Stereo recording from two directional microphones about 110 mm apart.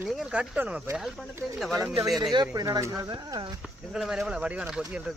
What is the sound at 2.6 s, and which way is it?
Speech, 25° right (ahead or behind).